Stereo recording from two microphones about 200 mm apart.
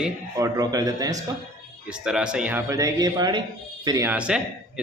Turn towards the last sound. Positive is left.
turn(degrees=-5)  # may be behind; listen again after turning